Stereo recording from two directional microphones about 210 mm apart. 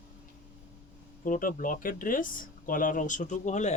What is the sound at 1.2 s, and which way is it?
Speech, 40° left (ahead or behind).